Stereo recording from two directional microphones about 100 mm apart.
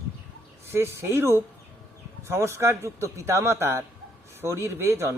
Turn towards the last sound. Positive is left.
turn(degrees=-25)  # may be behind; listen again after turning